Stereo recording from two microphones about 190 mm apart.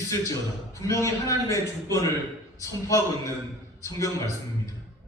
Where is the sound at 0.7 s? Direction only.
15° left (ahead or behind).